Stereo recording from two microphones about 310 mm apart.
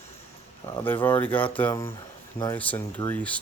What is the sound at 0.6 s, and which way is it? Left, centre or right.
Speech, centre.